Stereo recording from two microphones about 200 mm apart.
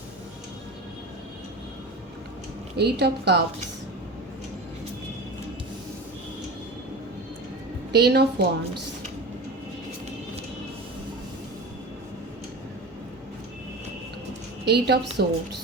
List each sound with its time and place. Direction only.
2.7 s a woman's voice: 55° right (ahead or behind)
7.9 s a woman's voice: 55° right (ahead or behind)
14.6 s a woman's voice: 55° right (ahead or behind)